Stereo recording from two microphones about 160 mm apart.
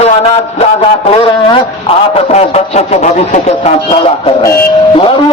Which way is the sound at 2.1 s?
40° left (ahead or behind).